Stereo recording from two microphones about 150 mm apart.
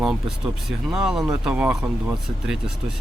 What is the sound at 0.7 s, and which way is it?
Speech, centre (ahead or behind).